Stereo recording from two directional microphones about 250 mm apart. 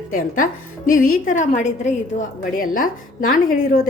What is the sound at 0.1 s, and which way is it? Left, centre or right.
Speech, left.